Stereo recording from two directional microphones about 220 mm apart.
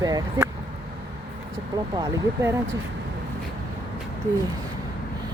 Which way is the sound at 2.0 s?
10° right (ahead or behind).